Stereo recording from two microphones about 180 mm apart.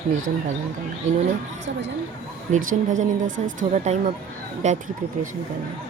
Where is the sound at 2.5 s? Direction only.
45° right (ahead or behind).